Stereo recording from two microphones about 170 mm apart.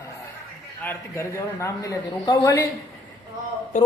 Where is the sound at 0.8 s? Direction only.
15° left (ahead or behind).